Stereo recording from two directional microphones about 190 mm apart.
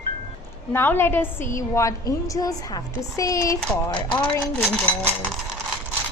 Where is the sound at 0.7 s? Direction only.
10° left (ahead or behind).